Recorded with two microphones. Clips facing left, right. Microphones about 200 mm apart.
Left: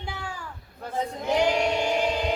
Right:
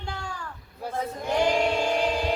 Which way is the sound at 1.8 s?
10° left (ahead or behind).